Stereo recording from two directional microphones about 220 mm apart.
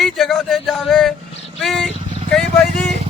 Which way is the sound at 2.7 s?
30° right (ahead or behind).